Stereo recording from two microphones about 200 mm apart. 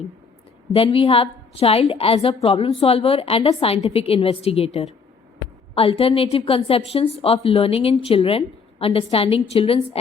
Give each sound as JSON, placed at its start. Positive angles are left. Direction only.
{"t": 0.7, "sound": "a woman's voice", "side_deg": 30}